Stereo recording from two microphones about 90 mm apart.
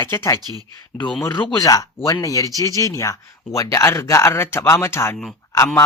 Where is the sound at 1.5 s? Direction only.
40° left (ahead or behind).